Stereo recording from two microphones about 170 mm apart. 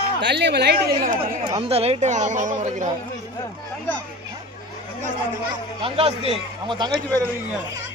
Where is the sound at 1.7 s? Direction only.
35° right (ahead or behind).